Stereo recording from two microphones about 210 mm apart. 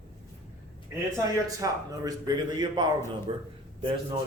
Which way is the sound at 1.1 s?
15° right (ahead or behind).